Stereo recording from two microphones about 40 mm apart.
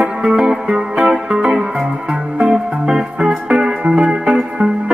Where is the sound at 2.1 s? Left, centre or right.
Right.